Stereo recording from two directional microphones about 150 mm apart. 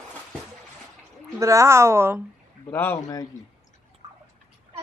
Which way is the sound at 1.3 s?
20° right (ahead or behind).